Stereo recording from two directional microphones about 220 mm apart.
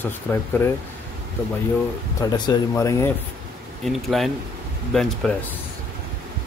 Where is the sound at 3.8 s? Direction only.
Centre (ahead or behind).